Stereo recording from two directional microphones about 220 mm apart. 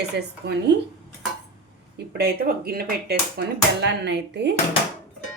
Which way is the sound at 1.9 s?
45° right (ahead or behind).